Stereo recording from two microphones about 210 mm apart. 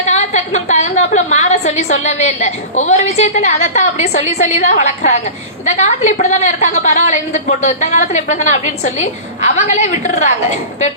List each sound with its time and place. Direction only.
0.1 s a woman's voice: 30° left (ahead or behind)